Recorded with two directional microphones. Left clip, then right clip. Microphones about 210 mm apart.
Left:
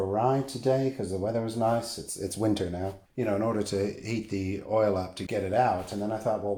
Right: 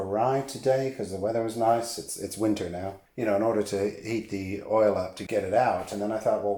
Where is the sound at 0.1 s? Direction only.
25° left (ahead or behind).